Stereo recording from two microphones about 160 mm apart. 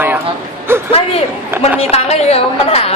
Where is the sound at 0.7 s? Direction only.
15° right (ahead or behind).